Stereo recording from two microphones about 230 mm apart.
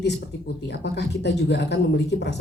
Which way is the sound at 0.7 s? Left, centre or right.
Left.